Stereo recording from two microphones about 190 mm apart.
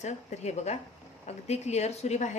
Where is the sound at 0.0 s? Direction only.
35° left (ahead or behind).